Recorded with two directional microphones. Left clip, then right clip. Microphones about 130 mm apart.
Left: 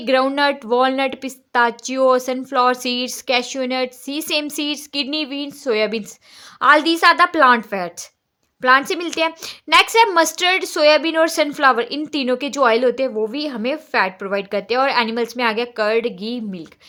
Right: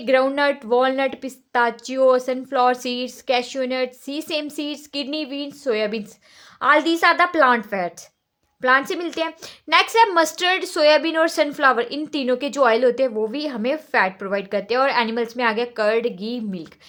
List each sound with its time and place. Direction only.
0.0 s a woman's voice: 25° left (ahead or behind)